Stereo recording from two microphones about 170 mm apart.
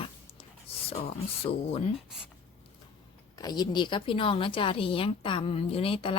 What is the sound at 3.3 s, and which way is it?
A woman's voice, 25° left (ahead or behind).